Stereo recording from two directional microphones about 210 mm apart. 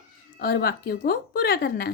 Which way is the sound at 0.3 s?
50° left (ahead or behind).